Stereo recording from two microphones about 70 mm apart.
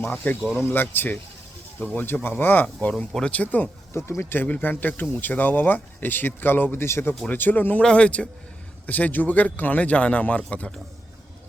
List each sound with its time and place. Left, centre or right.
0.2 s speech: left
3.1 s speech: centre
3.3 s speech: left
7.3 s speech: left